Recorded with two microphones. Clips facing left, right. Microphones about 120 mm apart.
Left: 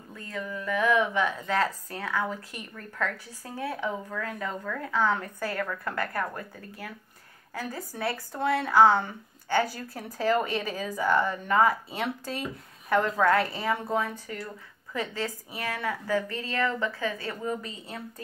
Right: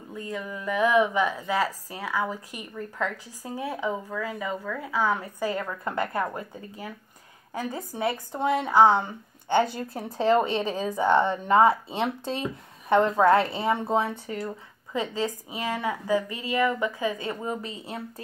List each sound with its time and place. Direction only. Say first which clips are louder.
0.1 s a woman's voice: right 2 dB; 15° right (ahead or behind)